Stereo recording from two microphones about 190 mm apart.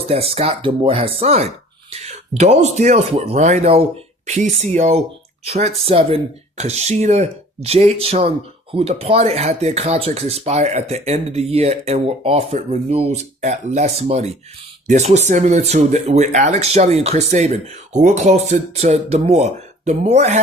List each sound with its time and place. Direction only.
0.1 s speech: 30° right (ahead or behind)